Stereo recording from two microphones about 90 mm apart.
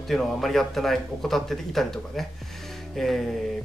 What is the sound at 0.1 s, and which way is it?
Speech, 5° left (ahead or behind).